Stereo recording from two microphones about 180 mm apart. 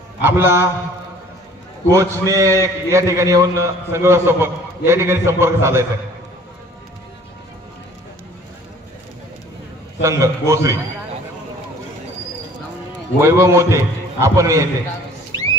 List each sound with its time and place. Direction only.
0.2 s a man's voice: 15° right (ahead or behind)
1.9 s a man's voice: 15° right (ahead or behind)
10.0 s a man's voice: 15° right (ahead or behind)
13.2 s a man's voice: 15° right (ahead or behind)